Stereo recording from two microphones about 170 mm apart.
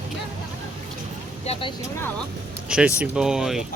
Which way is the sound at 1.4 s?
35° left (ahead or behind).